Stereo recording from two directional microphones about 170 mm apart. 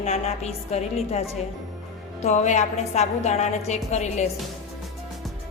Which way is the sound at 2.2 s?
45° left (ahead or behind).